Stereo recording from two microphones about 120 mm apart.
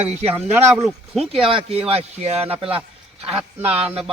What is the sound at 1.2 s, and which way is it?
Speech, 50° right (ahead or behind).